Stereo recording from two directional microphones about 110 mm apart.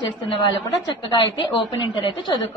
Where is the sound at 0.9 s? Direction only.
45° left (ahead or behind).